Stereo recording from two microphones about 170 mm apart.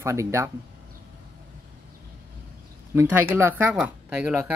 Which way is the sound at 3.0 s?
15° right (ahead or behind).